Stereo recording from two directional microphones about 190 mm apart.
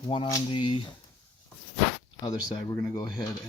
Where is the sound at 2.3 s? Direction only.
20° left (ahead or behind).